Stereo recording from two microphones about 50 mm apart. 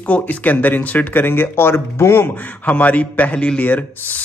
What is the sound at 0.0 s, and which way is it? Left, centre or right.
Speech, left.